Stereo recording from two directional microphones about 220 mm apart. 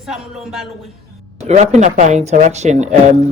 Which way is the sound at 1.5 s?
30° right (ahead or behind).